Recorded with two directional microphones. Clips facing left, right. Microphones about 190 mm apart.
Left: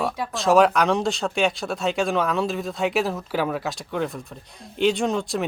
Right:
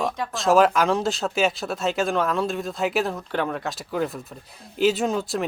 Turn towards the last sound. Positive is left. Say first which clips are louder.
# even
turn(degrees=0)  # may be behind; listen again after turning